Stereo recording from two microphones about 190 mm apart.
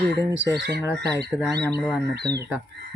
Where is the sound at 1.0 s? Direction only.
60° right (ahead or behind).